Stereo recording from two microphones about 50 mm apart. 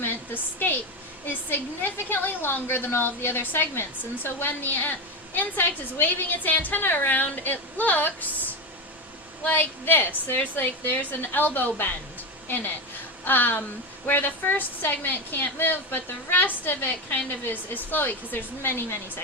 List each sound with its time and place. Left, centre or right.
0.0 s a woman's voice: left
9.4 s a woman's voice: left